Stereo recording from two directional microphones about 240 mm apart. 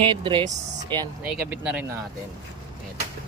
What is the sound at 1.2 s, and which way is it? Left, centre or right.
Speech, centre.